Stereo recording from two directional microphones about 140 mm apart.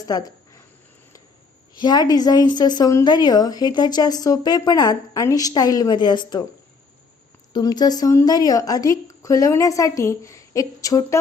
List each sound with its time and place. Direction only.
0.0 s speech: 25° left (ahead or behind)
1.7 s speech: 30° left (ahead or behind)
7.5 s speech: 30° left (ahead or behind)